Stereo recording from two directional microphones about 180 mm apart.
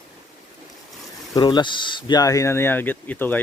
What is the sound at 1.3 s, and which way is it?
Speech, 25° left (ahead or behind).